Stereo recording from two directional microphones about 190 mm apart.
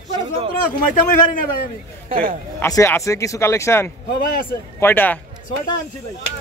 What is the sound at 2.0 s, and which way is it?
Speech, 45° right (ahead or behind).